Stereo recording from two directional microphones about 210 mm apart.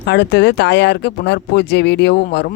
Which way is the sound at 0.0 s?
55° left (ahead or behind).